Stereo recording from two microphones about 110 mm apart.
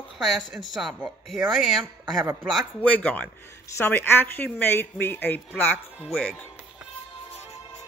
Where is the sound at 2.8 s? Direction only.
15° left (ahead or behind).